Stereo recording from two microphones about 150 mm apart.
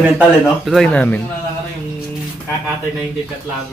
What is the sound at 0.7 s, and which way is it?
Speech, centre (ahead or behind).